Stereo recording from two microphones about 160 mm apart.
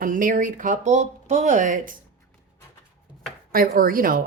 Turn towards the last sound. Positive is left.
turn(degrees=-60)  # may be behind; listen again after turning